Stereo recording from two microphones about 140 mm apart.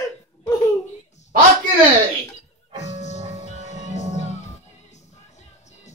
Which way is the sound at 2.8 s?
55° left (ahead or behind).